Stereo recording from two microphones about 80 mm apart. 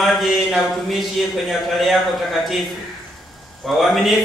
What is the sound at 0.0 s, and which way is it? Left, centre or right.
Speech, centre.